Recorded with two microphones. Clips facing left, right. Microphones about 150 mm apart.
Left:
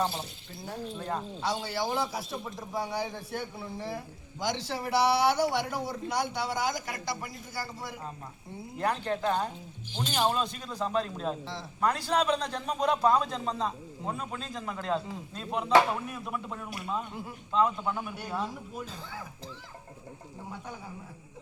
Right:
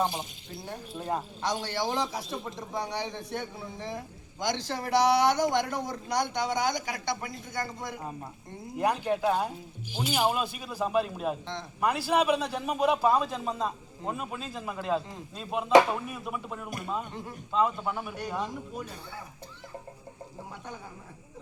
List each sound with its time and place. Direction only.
0.0 s a man's voice: 15° right (ahead or behind)
1.4 s a man's voice: 5° left (ahead or behind)
8.8 s a man's voice: 10° right (ahead or behind)
18.2 s a man's voice: 5° left (ahead or behind)